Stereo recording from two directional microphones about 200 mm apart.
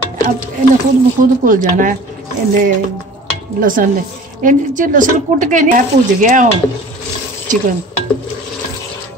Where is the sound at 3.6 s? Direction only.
45° right (ahead or behind).